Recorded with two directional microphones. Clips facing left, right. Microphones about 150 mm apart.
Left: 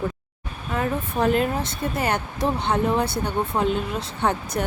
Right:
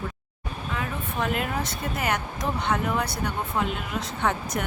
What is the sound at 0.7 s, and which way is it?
Speech, 40° left (ahead or behind).